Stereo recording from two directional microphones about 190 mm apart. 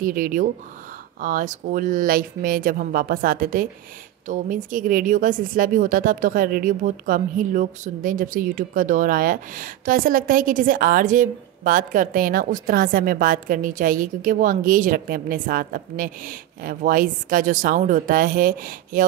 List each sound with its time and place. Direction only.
0.0 s speech: 45° right (ahead or behind)